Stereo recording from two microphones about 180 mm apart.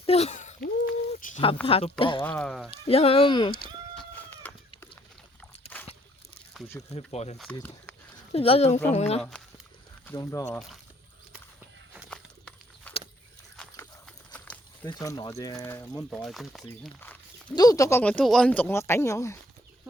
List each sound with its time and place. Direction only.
0.0 s a sound: 35° left (ahead or behind)
1.6 s speech: 30° left (ahead or behind)
2.2 s speech: 5° left (ahead or behind)
2.6 s speech: 35° left (ahead or behind)
3.9 s chicken: 10° left (ahead or behind)
5.7 s a sound: 10° left (ahead or behind)
6.9 s speech: 35° left (ahead or behind)
10.1 s speech: 15° left (ahead or behind)
10.4 s speech: 5° left (ahead or behind)
12.1 s a sound: 5° left (ahead or behind)
14.8 s speech: 20° left (ahead or behind)
17.5 s speech: 20° left (ahead or behind)